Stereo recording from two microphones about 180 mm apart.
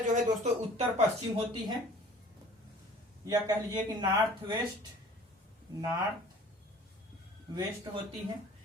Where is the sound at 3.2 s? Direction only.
20° right (ahead or behind).